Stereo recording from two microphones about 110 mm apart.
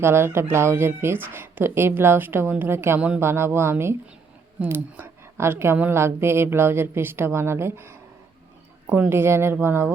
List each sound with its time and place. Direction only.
0.0 s a woman's voice: 20° right (ahead or behind)